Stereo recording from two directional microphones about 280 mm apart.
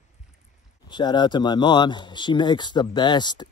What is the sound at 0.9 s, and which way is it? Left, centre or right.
Speech, centre.